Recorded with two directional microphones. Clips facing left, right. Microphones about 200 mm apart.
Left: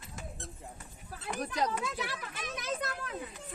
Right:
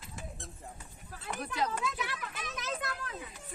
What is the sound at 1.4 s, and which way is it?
Speech, 40° left (ahead or behind).